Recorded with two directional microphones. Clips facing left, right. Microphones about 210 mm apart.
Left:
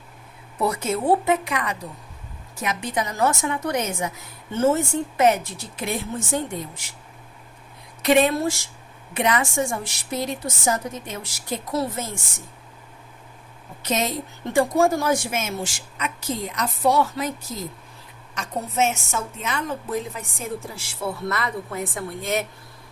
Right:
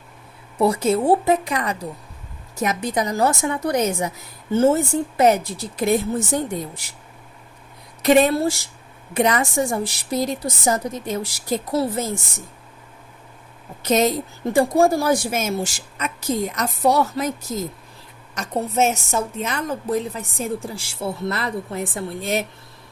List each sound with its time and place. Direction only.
0.6 s a woman's voice: 30° right (ahead or behind)
8.0 s a woman's voice: 40° right (ahead or behind)
14.5 s a woman's voice: 35° right (ahead or behind)
18.3 s a woman's voice: 40° right (ahead or behind)